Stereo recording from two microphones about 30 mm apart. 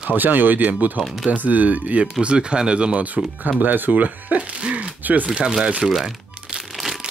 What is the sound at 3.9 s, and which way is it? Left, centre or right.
Speech, right.